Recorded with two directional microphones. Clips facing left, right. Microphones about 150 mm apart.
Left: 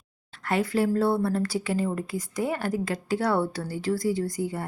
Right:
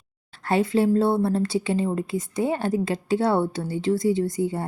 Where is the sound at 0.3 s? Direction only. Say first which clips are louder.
Right 4 dB; 30° right (ahead or behind).